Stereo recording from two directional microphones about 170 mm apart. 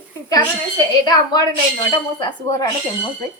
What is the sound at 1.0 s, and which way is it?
A woman's voice, 25° left (ahead or behind).